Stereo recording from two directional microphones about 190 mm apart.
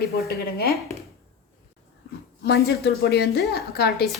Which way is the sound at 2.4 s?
55° left (ahead or behind).